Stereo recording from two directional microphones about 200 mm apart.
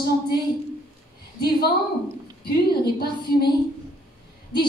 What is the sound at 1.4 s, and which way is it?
A woman's voice, 50° left (ahead or behind).